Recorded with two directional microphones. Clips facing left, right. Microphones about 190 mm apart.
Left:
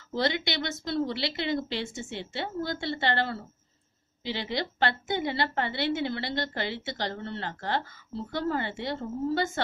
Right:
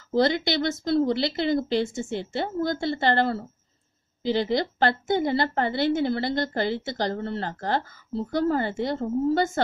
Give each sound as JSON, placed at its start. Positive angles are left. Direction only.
{"t": 0.1, "sound": "a woman's voice", "side_deg": -40}